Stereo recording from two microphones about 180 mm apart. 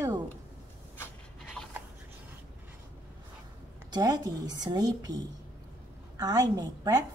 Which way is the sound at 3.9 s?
20° right (ahead or behind).